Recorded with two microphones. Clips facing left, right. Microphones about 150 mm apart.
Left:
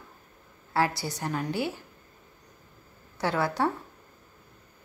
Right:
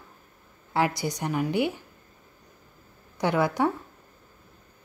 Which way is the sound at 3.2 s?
15° right (ahead or behind).